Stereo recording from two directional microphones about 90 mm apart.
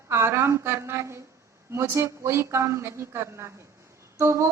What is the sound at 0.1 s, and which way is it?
A woman's voice, 30° right (ahead or behind).